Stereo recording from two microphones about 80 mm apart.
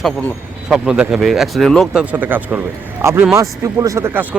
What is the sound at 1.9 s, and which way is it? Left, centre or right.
Speech, centre.